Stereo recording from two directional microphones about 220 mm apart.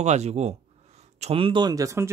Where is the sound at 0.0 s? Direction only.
30° right (ahead or behind).